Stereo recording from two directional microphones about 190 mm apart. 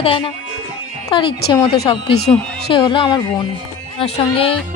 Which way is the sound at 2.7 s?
25° left (ahead or behind).